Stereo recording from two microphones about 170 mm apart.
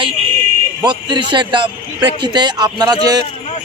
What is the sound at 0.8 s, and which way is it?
A man's voice, 25° right (ahead or behind).